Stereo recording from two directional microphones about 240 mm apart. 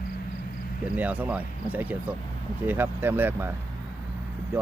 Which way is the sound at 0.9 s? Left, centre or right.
Centre.